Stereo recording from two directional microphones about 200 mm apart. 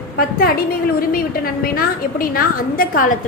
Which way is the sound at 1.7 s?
45° left (ahead or behind).